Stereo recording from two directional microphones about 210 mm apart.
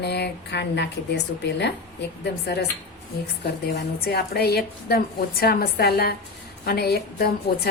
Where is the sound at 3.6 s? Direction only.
50° left (ahead or behind).